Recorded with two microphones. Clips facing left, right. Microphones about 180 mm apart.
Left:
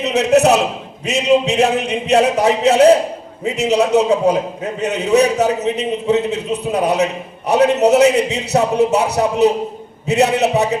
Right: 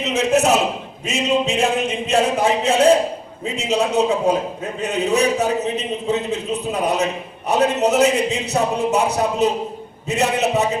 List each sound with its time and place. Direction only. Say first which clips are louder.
0.0 s a man's voice: left 4 dB; 65° left (ahead or behind)